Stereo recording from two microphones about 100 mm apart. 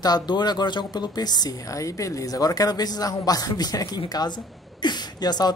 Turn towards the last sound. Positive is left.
turn(degrees=45)  # may be behind; listen again after turning